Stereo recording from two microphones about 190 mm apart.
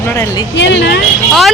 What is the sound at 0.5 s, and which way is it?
Speech, 70° left (ahead or behind).